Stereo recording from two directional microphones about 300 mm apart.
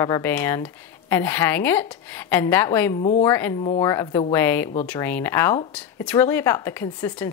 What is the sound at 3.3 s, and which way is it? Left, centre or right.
A woman's voice, centre.